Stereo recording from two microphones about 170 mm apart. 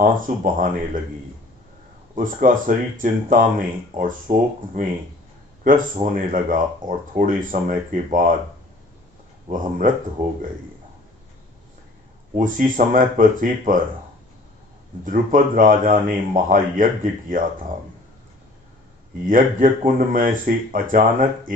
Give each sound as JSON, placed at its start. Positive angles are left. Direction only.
{"t": 0.0, "sound": "speech", "side_deg": -50}
{"t": 2.1, "sound": "speech", "side_deg": -50}
{"t": 9.5, "sound": "speech", "side_deg": -50}
{"t": 12.4, "sound": "speech", "side_deg": -50}
{"t": 15.0, "sound": "speech", "side_deg": -55}
{"t": 19.2, "sound": "speech", "side_deg": -55}